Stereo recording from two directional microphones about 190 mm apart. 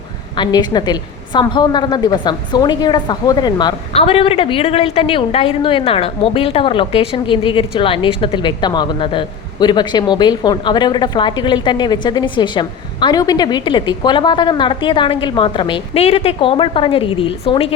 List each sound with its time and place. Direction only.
0.3 s a woman's voice: 20° left (ahead or behind)